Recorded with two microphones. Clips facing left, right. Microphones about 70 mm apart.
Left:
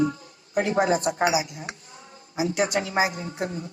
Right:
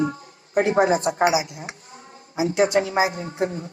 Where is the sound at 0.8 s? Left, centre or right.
Right.